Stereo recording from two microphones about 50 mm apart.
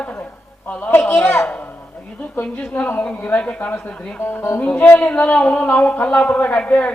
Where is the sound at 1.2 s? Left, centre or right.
Centre.